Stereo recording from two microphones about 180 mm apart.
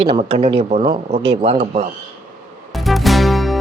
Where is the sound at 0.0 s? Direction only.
30° right (ahead or behind).